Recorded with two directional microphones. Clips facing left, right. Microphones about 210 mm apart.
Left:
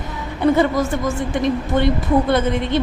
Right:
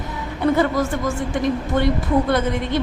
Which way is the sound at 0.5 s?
20° left (ahead or behind).